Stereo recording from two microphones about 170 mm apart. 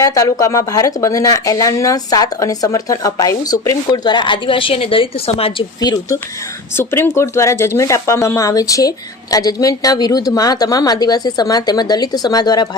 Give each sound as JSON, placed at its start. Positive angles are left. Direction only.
{"t": 0.0, "sound": "speech", "side_deg": 20}